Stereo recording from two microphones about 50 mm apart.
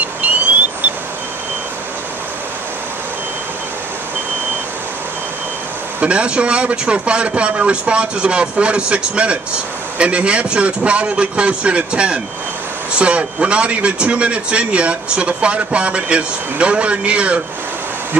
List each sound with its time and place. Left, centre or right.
5.9 s a man's voice: right